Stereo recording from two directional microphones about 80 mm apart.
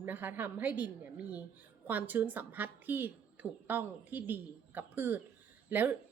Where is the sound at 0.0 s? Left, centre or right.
Right.